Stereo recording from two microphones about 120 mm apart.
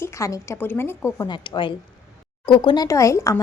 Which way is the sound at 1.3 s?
40° left (ahead or behind).